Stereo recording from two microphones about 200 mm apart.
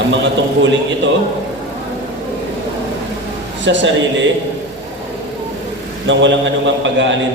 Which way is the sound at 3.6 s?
65° right (ahead or behind).